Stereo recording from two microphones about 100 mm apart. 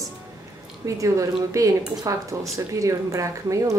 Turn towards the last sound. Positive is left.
turn(degrees=-30)  # may be behind; listen again after turning